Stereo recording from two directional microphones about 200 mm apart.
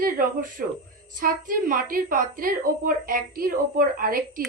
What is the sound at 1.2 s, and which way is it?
A woman's voice, 45° right (ahead or behind).